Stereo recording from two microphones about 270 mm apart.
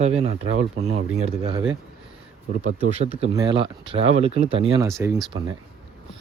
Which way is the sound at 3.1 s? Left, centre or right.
Centre.